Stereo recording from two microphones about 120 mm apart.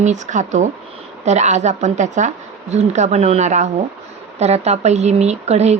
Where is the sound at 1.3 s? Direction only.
75° right (ahead or behind).